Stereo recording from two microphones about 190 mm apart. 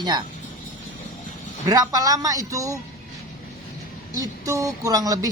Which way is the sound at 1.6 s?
20° right (ahead or behind).